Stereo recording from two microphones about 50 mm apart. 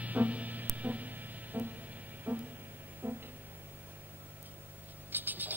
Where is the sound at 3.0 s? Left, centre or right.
Right.